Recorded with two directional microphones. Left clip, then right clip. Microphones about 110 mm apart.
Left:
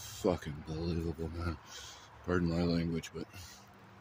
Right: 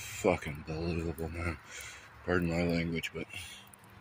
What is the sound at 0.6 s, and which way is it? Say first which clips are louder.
Speech: right 2 dB; 50° left (ahead or behind).